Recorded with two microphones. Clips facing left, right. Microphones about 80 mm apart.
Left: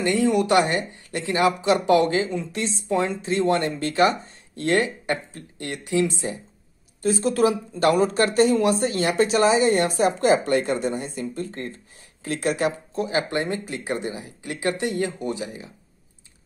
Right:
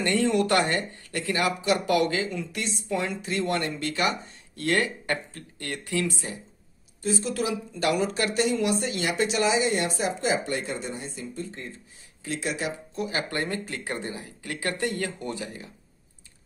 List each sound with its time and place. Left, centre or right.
0.0 s speech: centre
7.0 s speech: left
13.0 s speech: left